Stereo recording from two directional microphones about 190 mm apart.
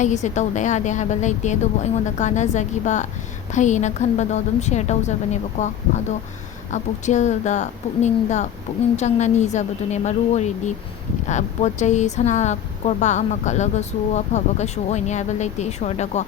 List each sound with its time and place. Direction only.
0.0 s speech: 40° left (ahead or behind)